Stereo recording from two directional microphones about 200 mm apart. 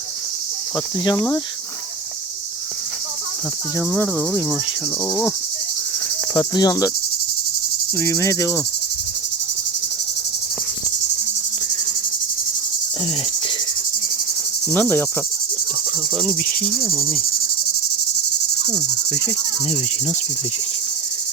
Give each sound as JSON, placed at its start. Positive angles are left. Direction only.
{"t": 1.0, "sound": "cricket", "side_deg": 15}
{"t": 3.8, "sound": "cricket", "side_deg": 10}
{"t": 6.3, "sound": "cricket", "side_deg": 20}
{"t": 7.9, "sound": "cricket", "side_deg": 15}
{"t": 14.7, "sound": "cricket", "side_deg": 10}
{"t": 16.1, "sound": "insect", "side_deg": 5}